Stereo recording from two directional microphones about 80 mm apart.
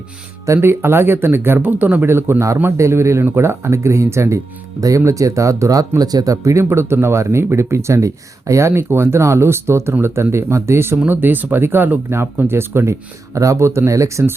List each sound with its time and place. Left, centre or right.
0.4 s speech: right